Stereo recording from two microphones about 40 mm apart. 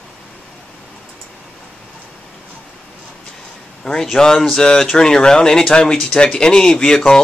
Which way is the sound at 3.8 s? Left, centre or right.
Centre.